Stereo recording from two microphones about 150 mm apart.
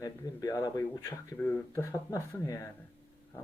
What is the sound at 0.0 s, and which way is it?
Speech, 25° left (ahead or behind).